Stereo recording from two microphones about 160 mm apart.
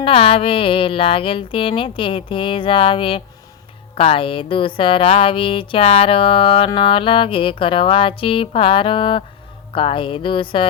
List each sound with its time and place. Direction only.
0.0 s music: 35° left (ahead or behind)